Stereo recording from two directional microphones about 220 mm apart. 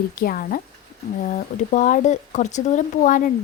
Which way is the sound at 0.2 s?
40° left (ahead or behind).